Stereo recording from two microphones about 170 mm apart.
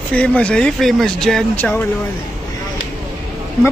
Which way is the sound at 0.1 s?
10° left (ahead or behind).